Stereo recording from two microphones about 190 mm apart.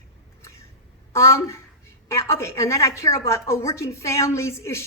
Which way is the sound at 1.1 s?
15° left (ahead or behind).